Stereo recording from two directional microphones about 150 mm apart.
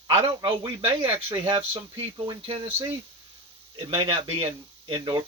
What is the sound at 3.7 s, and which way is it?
Speech, 35° right (ahead or behind).